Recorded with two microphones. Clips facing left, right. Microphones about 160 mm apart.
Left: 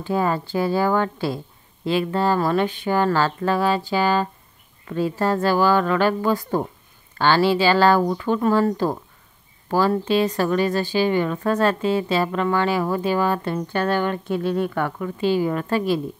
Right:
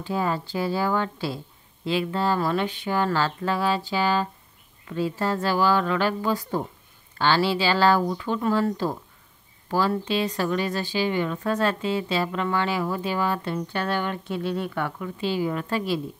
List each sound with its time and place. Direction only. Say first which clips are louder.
0.0 s speech: left 4 dB; 50° left (ahead or behind)